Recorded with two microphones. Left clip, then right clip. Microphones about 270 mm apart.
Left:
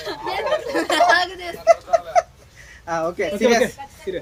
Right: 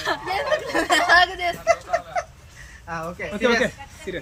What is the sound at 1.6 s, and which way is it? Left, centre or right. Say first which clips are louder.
Chuckle: left 8 dB; left.